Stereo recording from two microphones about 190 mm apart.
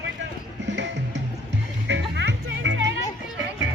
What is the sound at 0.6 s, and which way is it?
Music, 65° right (ahead or behind).